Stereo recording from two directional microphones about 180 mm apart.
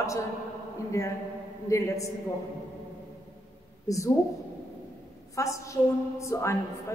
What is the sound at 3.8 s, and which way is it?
Speech, 15° left (ahead or behind).